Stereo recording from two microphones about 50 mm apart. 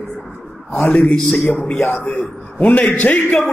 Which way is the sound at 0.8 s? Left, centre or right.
Left.